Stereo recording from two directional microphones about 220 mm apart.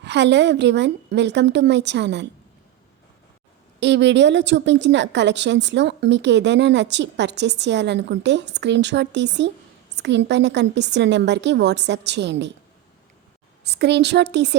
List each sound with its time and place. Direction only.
0.0 s a woman's voice: 50° right (ahead or behind)
3.8 s a woman's voice: 50° right (ahead or behind)
13.7 s a woman's voice: 50° right (ahead or behind)